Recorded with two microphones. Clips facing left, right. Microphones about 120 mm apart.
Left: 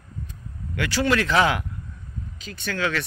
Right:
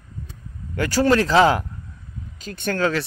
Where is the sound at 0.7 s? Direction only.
40° right (ahead or behind).